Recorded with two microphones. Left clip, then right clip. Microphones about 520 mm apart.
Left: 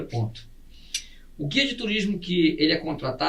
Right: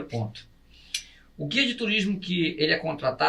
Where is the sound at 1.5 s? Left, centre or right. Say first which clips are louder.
Even; right.